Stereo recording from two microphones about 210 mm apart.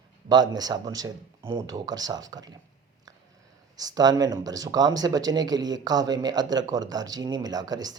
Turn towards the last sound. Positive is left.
turn(degrees=-20)  # may be behind; listen again after turning